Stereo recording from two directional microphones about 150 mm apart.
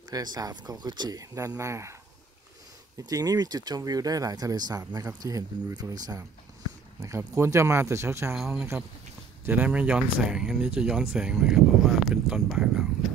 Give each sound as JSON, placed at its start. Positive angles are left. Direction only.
{"t": 0.1, "sound": "speech", "side_deg": -25}
{"t": 3.0, "sound": "speech", "side_deg": -25}
{"t": 8.4, "sound": "speech", "side_deg": 0}